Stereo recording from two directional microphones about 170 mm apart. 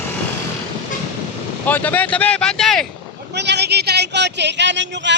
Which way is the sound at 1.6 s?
10° left (ahead or behind).